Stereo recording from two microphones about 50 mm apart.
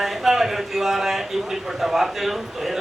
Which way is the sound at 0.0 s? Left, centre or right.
Centre.